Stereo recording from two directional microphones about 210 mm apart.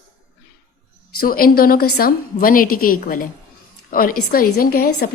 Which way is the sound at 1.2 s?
45° left (ahead or behind).